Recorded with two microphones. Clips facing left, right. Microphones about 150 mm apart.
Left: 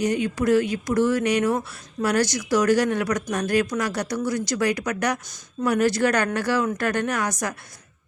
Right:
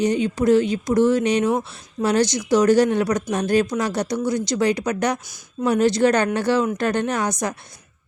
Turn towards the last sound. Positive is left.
turn(degrees=-20)  # may be behind; listen again after turning